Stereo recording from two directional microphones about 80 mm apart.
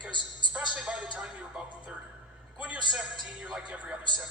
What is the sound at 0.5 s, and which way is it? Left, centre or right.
Music, centre.